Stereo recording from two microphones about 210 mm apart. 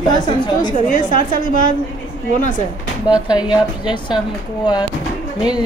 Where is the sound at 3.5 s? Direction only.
20° left (ahead or behind).